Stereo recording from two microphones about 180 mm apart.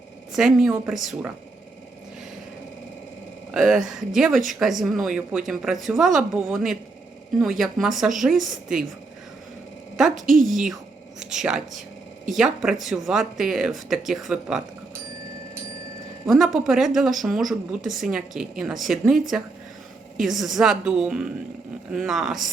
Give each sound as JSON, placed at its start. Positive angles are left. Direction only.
{"t": 0.3, "sound": "speech", "side_deg": 0}
{"t": 3.5, "sound": "speech", "side_deg": -5}
{"t": 10.2, "sound": "a woman's voice", "side_deg": -50}
{"t": 10.4, "sound": "speech", "side_deg": 0}
{"t": 16.3, "sound": "speech", "side_deg": 0}
{"t": 20.2, "sound": "speech", "side_deg": 0}